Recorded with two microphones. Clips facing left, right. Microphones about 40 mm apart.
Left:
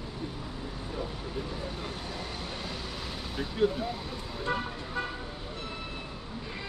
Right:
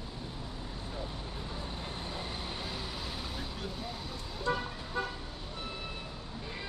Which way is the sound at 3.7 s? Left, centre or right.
Centre.